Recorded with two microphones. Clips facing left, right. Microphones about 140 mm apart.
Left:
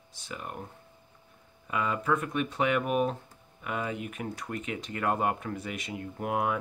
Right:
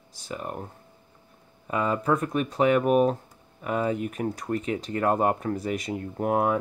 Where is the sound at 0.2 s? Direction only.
40° right (ahead or behind).